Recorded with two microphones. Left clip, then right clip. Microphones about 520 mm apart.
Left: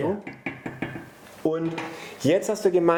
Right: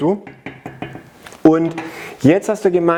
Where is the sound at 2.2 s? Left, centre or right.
Right.